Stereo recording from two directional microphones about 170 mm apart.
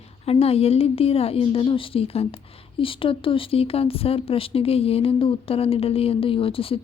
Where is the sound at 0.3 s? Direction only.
35° left (ahead or behind).